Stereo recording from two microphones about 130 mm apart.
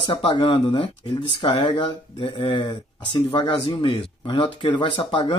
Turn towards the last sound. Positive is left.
turn(degrees=40)  # may be behind; listen again after turning